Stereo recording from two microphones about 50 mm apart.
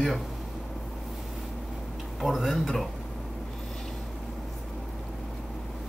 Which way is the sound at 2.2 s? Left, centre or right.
Centre.